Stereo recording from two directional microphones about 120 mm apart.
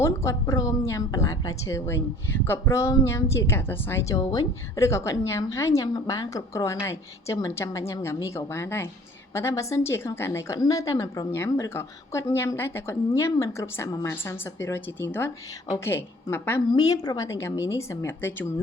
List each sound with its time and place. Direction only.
0.0 s a woman's voice: 25° left (ahead or behind)
16.7 s a woman's voice: 30° left (ahead or behind)